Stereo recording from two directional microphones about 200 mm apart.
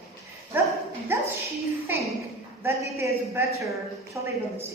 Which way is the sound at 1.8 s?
15° right (ahead or behind).